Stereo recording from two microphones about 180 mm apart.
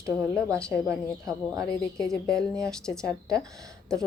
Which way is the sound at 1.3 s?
20° right (ahead or behind).